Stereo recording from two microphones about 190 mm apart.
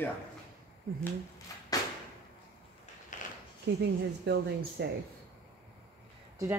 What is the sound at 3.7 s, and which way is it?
Speech, 60° right (ahead or behind).